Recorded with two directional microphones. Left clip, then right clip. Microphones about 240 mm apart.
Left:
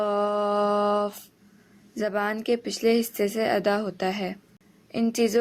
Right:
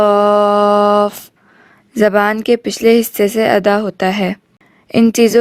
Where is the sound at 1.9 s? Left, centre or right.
Right.